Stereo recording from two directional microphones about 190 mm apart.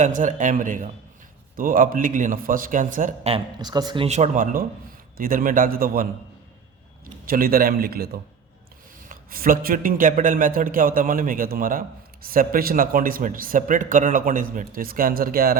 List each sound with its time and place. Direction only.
0.0 s a man's voice: 40° right (ahead or behind)
3.3 s a man's voice: 20° right (ahead or behind); by 6.1 s 50° right (ahead or behind)
7.3 s a man's voice: 50° right (ahead or behind)